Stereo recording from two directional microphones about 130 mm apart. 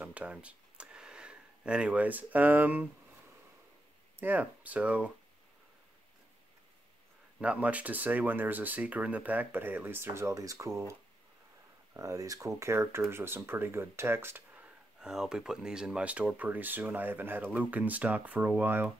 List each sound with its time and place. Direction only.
0.0 s a sound: 10° right (ahead or behind)
4.2 s speech: 15° right (ahead or behind)
7.3 s speech: 10° right (ahead or behind)